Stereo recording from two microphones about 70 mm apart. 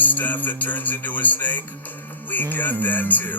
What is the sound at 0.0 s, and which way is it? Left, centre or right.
Music, left.